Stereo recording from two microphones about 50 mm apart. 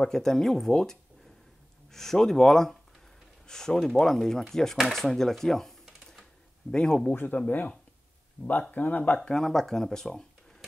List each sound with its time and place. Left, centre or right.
0.0 s speech: centre
7.3 s speech: left
9.3 s speech: centre